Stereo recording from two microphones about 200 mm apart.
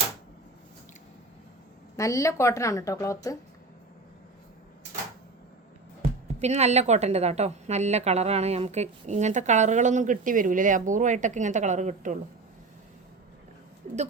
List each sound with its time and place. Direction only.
2.0 s a woman's voice: 15° left (ahead or behind)
6.0 s a woman's voice: 35° right (ahead or behind)
13.8 s a sound: 35° right (ahead or behind)